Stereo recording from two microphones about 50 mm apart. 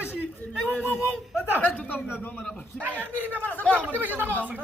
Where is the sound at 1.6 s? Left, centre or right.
Left.